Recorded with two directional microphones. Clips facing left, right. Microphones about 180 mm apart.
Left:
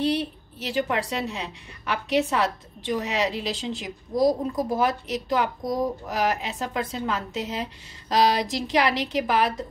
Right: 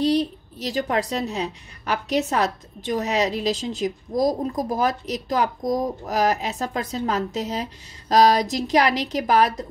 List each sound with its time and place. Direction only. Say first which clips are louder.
0.0 s a woman's voice: right 4 dB; 35° right (ahead or behind)